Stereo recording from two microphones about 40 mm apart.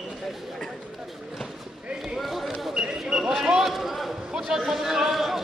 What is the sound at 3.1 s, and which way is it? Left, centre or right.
Basketball bounce, centre.